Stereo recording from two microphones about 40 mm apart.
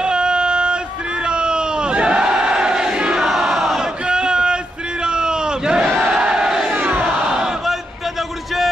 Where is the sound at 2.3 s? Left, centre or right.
Centre.